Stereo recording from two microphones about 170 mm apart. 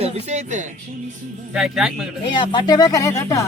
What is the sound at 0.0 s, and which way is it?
Speech, 40° right (ahead or behind).